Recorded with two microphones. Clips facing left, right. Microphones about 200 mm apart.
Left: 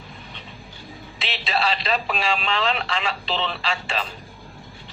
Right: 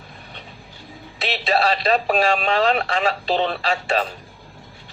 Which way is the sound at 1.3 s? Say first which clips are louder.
Right 5 dB; 40° right (ahead or behind).